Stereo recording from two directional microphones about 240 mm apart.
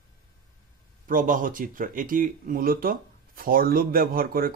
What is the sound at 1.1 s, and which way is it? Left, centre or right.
Speech, right.